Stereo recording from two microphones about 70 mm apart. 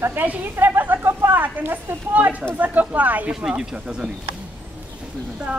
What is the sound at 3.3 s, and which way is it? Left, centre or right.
Speech, centre.